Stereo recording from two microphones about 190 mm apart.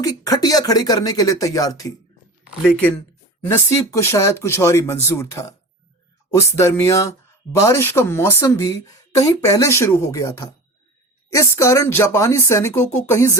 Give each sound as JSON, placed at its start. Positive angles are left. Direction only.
{"t": 0.0, "sound": "speech", "side_deg": 20}
{"t": 3.4, "sound": "speech", "side_deg": 15}